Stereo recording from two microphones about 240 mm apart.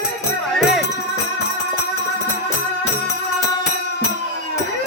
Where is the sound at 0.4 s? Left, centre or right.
Centre.